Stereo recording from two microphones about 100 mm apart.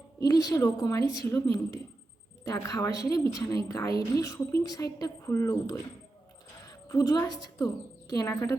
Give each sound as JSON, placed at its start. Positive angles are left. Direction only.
{"t": 0.2, "sound": "a woman's voice", "side_deg": 40}